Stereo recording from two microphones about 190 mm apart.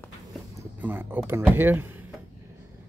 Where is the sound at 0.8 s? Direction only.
10° right (ahead or behind).